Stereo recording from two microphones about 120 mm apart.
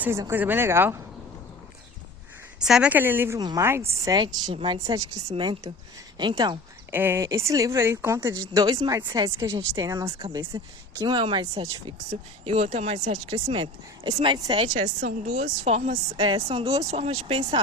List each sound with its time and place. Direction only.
0.0 s speech: 20° right (ahead or behind)
2.6 s speech: 5° right (ahead or behind)
2.9 s speech: 15° right (ahead or behind)
3.3 s a woman's voice: 30° right (ahead or behind)
6.9 s a woman's voice: 20° right (ahead or behind); by 9.3 s 40° right (ahead or behind)
9.4 s a woman's voice: 25° right (ahead or behind)
11.0 s speech: 45° right (ahead or behind)
12.5 s speech: 65° right (ahead or behind); by 14.3 s 45° right (ahead or behind)
14.3 s a woman's voice: 30° right (ahead or behind)
14.7 s speech: 90° right; by 16.0 s 65° right (ahead or behind)
16.2 s speech: 50° right (ahead or behind)